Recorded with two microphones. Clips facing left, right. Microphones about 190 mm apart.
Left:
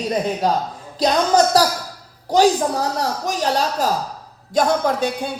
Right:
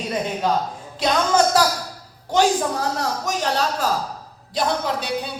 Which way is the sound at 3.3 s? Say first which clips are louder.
Left 2 dB; 40° left (ahead or behind).